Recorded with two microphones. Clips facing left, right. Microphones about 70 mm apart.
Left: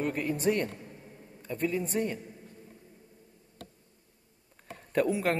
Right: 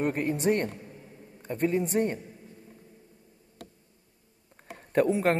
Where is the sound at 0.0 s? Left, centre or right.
Right.